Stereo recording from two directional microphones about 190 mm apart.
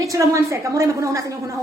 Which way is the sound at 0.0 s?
15° right (ahead or behind).